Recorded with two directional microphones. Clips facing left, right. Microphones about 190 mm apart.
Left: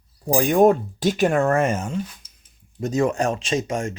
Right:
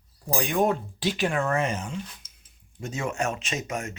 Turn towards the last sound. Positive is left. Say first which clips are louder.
# left 8 dB
turn(degrees=30)  # may be behind; listen again after turning